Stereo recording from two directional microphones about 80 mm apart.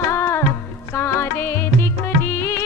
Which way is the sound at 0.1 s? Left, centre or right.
Left.